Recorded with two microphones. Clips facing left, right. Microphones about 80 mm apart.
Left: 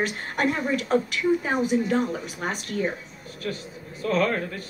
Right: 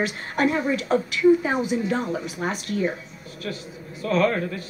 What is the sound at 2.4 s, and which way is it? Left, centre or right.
Speech, left.